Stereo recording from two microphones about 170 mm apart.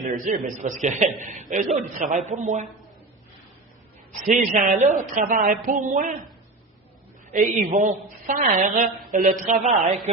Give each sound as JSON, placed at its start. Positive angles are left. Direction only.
{"t": 0.0, "sound": "a man's voice", "side_deg": -50}
{"t": 4.3, "sound": "a man's voice", "side_deg": -50}
{"t": 7.3, "sound": "a man's voice", "side_deg": -50}